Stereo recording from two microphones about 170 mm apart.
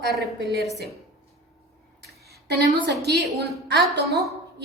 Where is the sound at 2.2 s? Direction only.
70° right (ahead or behind).